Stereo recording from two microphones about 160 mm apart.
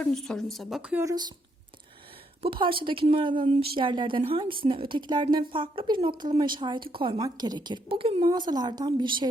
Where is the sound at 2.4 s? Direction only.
35° right (ahead or behind).